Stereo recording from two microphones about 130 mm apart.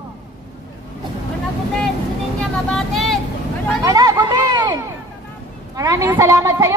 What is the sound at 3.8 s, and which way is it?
Chatter, 30° right (ahead or behind).